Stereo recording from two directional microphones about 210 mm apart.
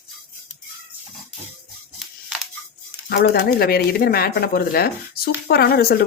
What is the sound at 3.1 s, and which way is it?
Speech, 45° left (ahead or behind).